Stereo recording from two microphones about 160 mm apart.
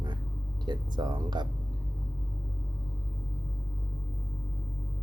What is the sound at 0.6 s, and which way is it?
Speech, 25° right (ahead or behind).